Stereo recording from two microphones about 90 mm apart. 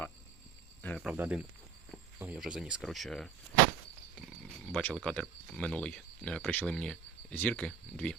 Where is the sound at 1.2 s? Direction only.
20° right (ahead or behind).